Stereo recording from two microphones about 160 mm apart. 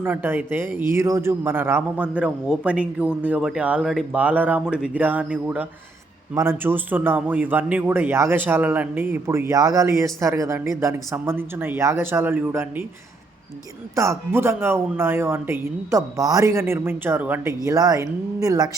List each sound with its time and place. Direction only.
0.0 s speech: 10° right (ahead or behind)
13.9 s speech: 15° right (ahead or behind)
17.7 s speech: 20° right (ahead or behind)